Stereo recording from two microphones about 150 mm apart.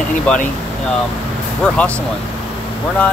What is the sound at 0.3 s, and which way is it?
Speech, 10° left (ahead or behind).